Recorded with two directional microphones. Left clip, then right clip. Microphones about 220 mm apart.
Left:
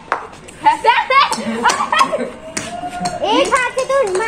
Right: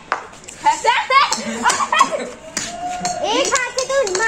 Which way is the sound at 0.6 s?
25° left (ahead or behind).